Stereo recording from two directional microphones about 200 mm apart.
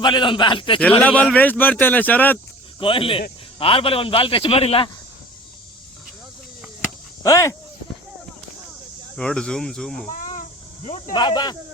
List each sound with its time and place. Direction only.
0.0 s a man's voice: 25° left (ahead or behind)
1.0 s speech: 5° left (ahead or behind)
2.7 s a man's voice: 25° left (ahead or behind)
7.2 s speech: 15° left (ahead or behind)
9.1 s speech: 5° left (ahead or behind)
10.8 s speech: 30° left (ahead or behind)
11.1 s a man's voice: 20° left (ahead or behind)